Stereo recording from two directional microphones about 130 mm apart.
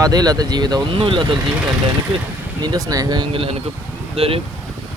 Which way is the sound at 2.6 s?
30° right (ahead or behind).